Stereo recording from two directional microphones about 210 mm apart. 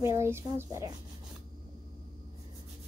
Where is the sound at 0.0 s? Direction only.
15° right (ahead or behind).